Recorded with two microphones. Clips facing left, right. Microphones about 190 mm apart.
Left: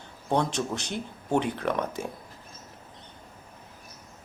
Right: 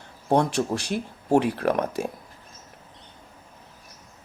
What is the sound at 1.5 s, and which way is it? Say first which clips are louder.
Speech: right 5 dB; 70° right (ahead or behind).